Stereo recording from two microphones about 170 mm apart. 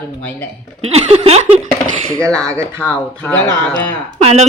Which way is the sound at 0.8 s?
40° right (ahead or behind).